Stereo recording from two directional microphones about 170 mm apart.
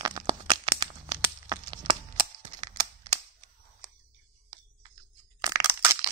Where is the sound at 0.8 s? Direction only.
25° right (ahead or behind).